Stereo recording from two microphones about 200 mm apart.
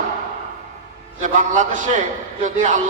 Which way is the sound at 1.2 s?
40° right (ahead or behind).